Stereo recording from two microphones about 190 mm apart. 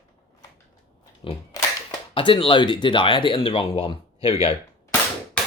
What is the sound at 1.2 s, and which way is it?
Speech, 30° left (ahead or behind).